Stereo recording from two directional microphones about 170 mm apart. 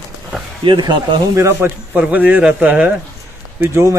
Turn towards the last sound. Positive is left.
turn(degrees=-15)  # may be behind; listen again after turning